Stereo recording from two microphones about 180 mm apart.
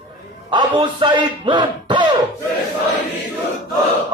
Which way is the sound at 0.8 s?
25° right (ahead or behind).